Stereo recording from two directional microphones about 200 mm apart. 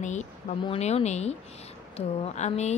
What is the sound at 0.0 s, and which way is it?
Speech, 35° left (ahead or behind).